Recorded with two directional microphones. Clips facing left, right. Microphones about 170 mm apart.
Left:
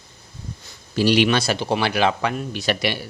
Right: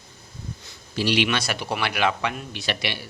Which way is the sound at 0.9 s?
45° left (ahead or behind).